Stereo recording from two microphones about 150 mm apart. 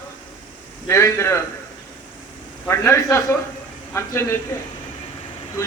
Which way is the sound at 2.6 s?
15° left (ahead or behind).